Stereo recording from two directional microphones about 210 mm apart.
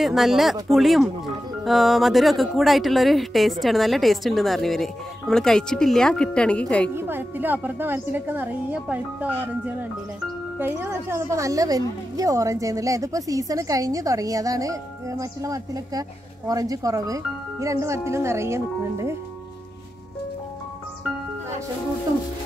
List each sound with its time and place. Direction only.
0.0 s speech: centre (ahead or behind)
7.0 s speech: 10° right (ahead or behind)
10.6 s speech: 10° right (ahead or behind)